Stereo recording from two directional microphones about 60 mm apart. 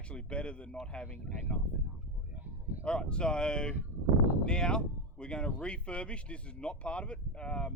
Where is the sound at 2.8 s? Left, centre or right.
Centre.